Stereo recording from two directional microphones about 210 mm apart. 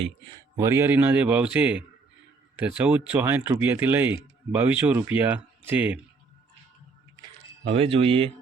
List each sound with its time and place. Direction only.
0.0 s speech: 20° right (ahead or behind)
7.6 s speech: 25° right (ahead or behind)